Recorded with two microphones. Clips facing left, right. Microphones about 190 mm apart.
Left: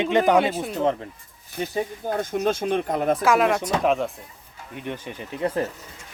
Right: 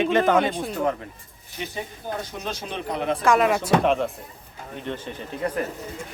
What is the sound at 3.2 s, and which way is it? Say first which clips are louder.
Speech: right 4 dB; centre (ahead or behind).